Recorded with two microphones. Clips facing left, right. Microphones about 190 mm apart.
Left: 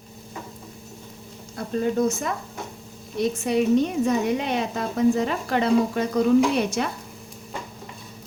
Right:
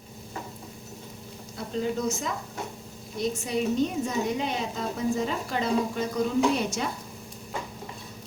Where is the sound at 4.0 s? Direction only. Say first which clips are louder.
Left 6 dB; 65° left (ahead or behind).